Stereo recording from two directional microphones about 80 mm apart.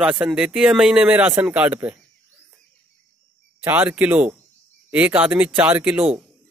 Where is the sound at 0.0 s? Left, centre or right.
Centre.